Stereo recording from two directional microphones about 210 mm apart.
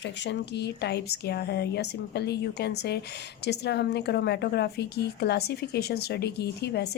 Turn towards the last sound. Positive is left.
turn(degrees=50)  # may be behind; listen again after turning